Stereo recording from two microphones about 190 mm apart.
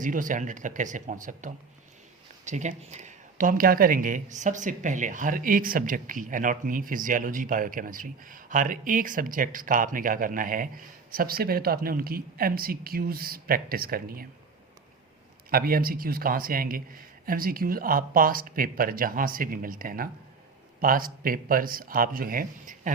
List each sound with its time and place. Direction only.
0.0 s speech: 45° right (ahead or behind)
15.4 s speech: 50° right (ahead or behind)